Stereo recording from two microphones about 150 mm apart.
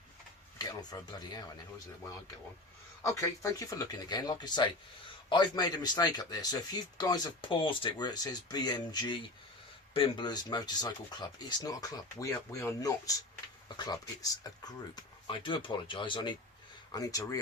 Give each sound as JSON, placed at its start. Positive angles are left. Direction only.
{"t": 0.6, "sound": "speech", "side_deg": 25}
{"t": 3.0, "sound": "speech", "side_deg": 20}